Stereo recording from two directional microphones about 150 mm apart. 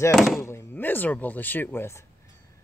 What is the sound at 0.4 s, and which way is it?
Speech, 15° left (ahead or behind).